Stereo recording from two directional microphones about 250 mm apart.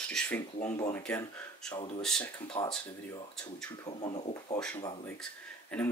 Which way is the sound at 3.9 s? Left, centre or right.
Left.